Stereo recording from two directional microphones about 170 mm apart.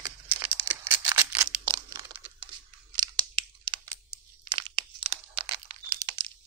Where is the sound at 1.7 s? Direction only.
25° right (ahead or behind).